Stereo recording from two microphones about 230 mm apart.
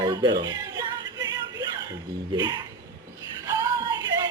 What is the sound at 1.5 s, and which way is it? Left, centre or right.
Chuckle, centre.